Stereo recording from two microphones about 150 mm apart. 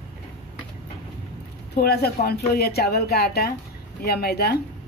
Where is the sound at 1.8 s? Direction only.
90° left.